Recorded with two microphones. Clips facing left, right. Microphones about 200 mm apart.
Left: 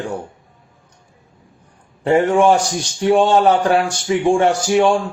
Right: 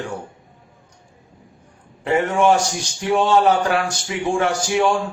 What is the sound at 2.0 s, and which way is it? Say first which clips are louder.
A man's voice: left 4 dB; 30° left (ahead or behind).